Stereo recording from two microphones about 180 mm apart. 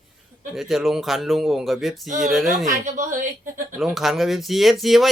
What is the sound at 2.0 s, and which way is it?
Speech, 45° right (ahead or behind).